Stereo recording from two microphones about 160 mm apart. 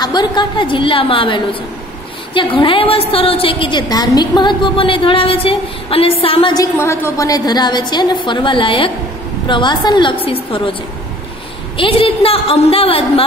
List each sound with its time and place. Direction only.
0.0 s a woman's voice: 25° left (ahead or behind)
6.5 s a woman's voice: 20° left (ahead or behind); by 13.2 s 35° left (ahead or behind)